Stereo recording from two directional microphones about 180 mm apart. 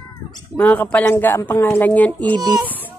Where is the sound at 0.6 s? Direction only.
10° left (ahead or behind).